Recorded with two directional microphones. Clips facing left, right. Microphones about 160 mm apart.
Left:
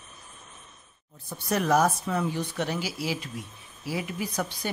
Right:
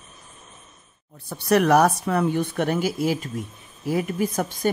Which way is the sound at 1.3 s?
70° right (ahead or behind).